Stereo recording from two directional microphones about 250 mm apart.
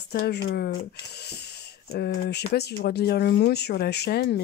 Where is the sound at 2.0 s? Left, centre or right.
Left.